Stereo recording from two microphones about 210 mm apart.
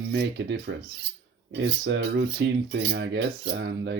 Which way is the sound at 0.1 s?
55° right (ahead or behind).